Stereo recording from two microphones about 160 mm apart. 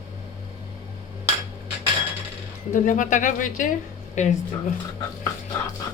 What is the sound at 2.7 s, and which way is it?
Speech, 55° left (ahead or behind).